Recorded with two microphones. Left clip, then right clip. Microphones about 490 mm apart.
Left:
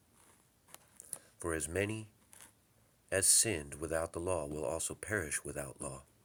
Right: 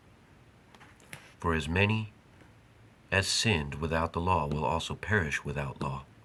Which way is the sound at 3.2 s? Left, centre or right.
Left.